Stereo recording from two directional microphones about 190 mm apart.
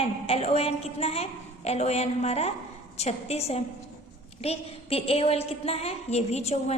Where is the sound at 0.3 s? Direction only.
30° left (ahead or behind).